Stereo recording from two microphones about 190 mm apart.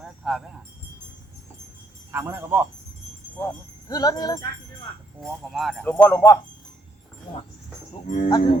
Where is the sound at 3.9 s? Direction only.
20° left (ahead or behind).